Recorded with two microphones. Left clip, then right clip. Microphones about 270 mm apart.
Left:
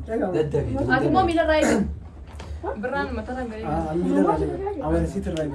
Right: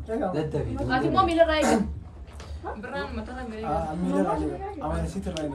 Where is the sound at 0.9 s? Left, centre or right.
Centre.